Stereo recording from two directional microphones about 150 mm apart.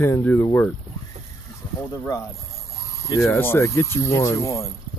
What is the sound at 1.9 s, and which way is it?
Speech, 20° left (ahead or behind).